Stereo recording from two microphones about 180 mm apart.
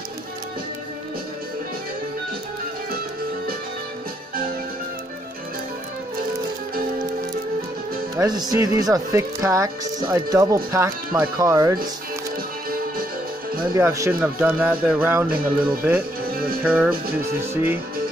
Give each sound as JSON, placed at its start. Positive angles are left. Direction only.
{"t": 8.2, "sound": "speech", "side_deg": -20}
{"t": 13.7, "sound": "speech", "side_deg": -15}